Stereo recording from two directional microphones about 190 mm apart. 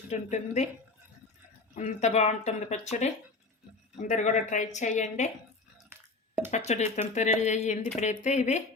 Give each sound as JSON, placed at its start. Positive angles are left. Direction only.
{"t": 0.1, "sound": "speech", "side_deg": 35}
{"t": 1.7, "sound": "speech", "side_deg": 40}
{"t": 5.7, "sound": "a sound", "side_deg": -10}
{"t": 6.7, "sound": "speech", "side_deg": 35}